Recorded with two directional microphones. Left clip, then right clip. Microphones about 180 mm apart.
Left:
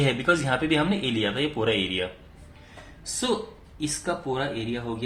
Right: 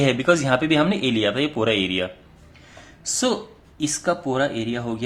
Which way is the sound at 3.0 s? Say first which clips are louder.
Right 4 dB; 55° right (ahead or behind).